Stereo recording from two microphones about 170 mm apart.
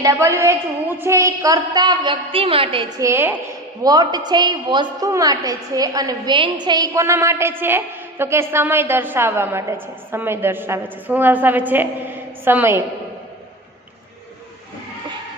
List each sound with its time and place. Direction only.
0.0 s a woman's voice: 20° right (ahead or behind); by 2.8 s 35° right (ahead or behind)
3.0 s a woman's voice: 15° right (ahead or behind)